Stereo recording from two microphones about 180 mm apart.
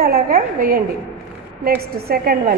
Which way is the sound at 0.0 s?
55° right (ahead or behind).